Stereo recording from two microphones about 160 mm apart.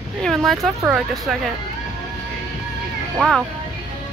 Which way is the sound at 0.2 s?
Centre (ahead or behind).